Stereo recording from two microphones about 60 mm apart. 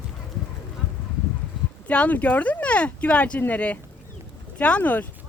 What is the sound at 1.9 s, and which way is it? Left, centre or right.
Speech, left.